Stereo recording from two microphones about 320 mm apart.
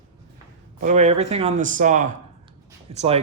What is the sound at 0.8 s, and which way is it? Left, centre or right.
Speech, right.